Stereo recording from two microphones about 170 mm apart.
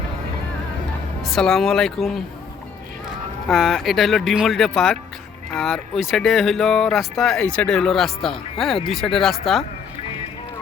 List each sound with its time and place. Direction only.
1.2 s speech: centre (ahead or behind)
3.4 s speech: centre (ahead or behind)